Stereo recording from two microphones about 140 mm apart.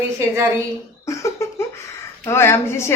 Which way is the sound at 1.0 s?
20° left (ahead or behind).